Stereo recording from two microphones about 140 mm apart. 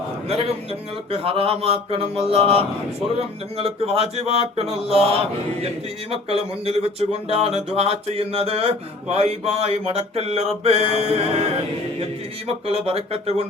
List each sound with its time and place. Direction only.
0.3 s speech: 45° right (ahead or behind)
12.6 s speech: 45° right (ahead or behind)